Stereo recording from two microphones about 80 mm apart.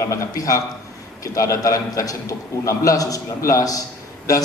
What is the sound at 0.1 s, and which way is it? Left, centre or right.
A man's voice, left.